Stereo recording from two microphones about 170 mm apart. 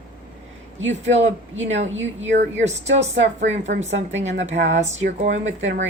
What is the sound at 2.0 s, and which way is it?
Speech, 90° right.